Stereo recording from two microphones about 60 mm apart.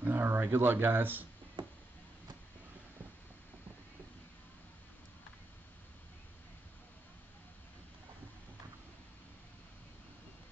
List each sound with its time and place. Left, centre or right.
0.0 s speech: right